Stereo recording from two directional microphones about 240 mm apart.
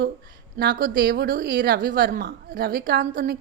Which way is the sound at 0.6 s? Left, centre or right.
Right.